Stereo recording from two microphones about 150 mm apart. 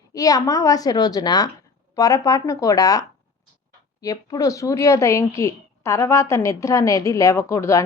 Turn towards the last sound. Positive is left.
turn(degrees=20)  # may be behind; listen again after turning